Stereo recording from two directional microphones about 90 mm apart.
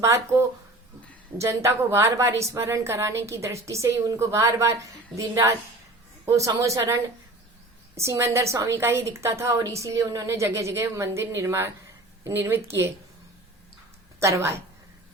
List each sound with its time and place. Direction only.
0.0 s a woman's voice: 30° right (ahead or behind)
14.2 s a woman's voice: 30° right (ahead or behind)